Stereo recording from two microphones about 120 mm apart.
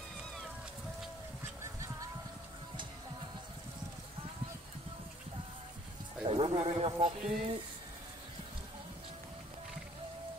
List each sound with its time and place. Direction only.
6.2 s speech: 50° right (ahead or behind)